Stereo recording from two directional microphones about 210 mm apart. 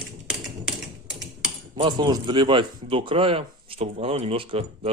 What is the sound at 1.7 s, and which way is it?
Speech, 20° right (ahead or behind).